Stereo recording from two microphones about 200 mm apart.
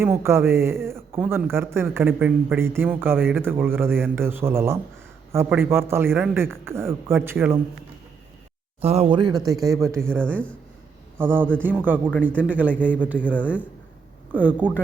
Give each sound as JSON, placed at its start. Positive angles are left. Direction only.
{"t": 0.0, "sound": "a man's voice", "side_deg": -10}
{"t": 8.8, "sound": "a man's voice", "side_deg": -30}
{"t": 10.2, "sound": "speech", "side_deg": 5}
{"t": 11.2, "sound": "a man's voice", "side_deg": -10}
{"t": 13.1, "sound": "speech", "side_deg": 10}
{"t": 14.3, "sound": "a man's voice", "side_deg": -10}